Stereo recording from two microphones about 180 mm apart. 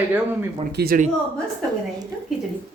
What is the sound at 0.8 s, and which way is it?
Speech, 55° right (ahead or behind).